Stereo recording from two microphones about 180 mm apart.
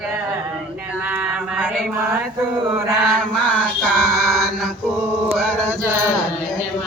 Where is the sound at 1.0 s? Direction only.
10° right (ahead or behind).